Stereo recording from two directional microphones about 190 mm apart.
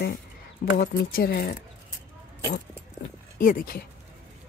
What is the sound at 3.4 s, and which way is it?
Speech, 45° left (ahead or behind).